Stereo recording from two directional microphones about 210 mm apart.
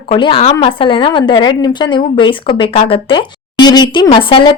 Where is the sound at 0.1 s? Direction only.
25° left (ahead or behind).